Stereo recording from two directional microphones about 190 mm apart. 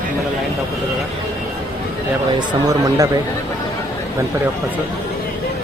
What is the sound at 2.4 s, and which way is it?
Speech, 15° right (ahead or behind).